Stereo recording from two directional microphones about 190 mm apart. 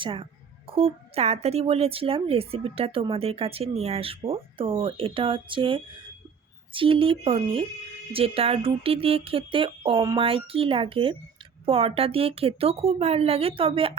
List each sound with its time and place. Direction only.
0.0 s a woman's voice: 25° right (ahead or behind)